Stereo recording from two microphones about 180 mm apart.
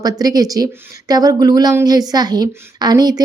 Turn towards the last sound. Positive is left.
turn(degrees=-20)  # may be behind; listen again after turning